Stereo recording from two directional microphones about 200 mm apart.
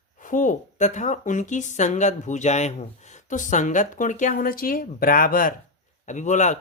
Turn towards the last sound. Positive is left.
turn(degrees=35)  # may be behind; listen again after turning